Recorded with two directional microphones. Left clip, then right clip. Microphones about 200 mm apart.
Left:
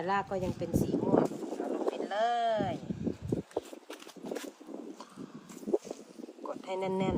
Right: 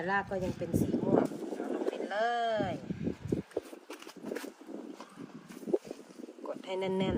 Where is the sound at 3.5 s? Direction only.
Centre (ahead or behind).